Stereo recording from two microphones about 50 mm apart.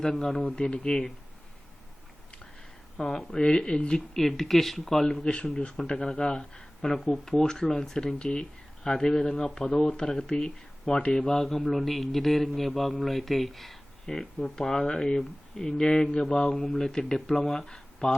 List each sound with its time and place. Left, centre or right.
0.0 s speech: centre
0.4 s speech: centre
3.0 s speech: centre
3.3 s speech: centre
4.1 s speech: centre
11.2 s a man's voice: centre